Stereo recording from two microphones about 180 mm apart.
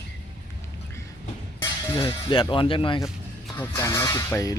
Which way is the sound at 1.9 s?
25° left (ahead or behind).